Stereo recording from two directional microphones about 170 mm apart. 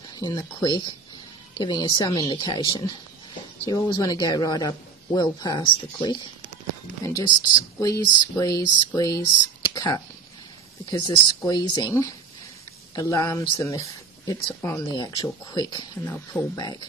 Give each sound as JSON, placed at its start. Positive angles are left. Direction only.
{"t": 0.1, "sound": "speech", "side_deg": 25}